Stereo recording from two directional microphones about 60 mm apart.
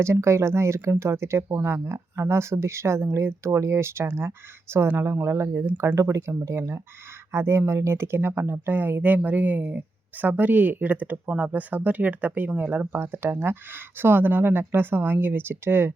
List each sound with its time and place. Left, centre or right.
0.0 s speech: right
13.0 s speech: right